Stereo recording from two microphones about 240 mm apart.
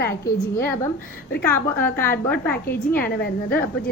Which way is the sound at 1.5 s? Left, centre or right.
Centre.